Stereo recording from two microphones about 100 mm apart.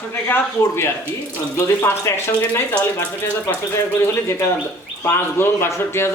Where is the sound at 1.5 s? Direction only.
30° left (ahead or behind).